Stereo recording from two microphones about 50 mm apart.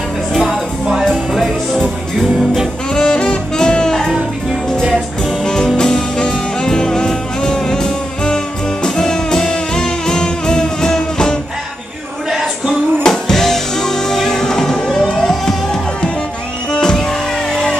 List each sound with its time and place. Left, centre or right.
0.4 s music: centre
2.9 s jazz: centre
5.4 s music: centre
12.3 s a sound: centre
13.0 s music: centre